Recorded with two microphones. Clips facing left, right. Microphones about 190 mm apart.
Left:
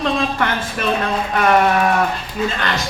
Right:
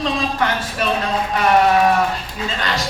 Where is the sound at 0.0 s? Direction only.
55° left (ahead or behind).